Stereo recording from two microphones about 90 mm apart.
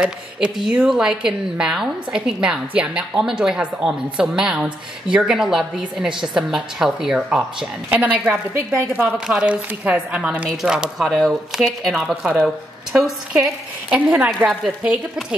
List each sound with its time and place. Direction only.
0.0 s speech: 10° right (ahead or behind)